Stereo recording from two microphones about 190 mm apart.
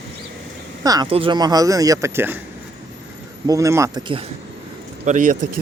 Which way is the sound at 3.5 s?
15° right (ahead or behind).